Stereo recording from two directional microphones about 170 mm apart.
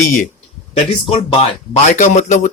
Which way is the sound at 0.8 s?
35° left (ahead or behind).